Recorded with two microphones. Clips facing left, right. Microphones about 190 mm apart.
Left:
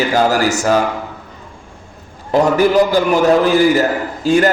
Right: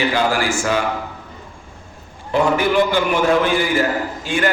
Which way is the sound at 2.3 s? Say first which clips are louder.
Left 4 dB; 40° left (ahead or behind).